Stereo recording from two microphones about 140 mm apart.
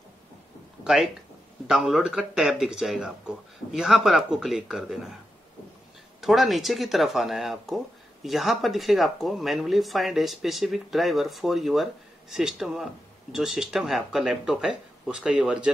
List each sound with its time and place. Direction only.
0.8 s speech: centre (ahead or behind)
6.2 s speech: centre (ahead or behind)